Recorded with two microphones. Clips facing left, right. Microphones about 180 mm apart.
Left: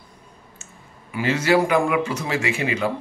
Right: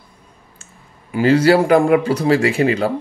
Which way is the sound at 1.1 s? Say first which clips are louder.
Right 7 dB; 35° right (ahead or behind).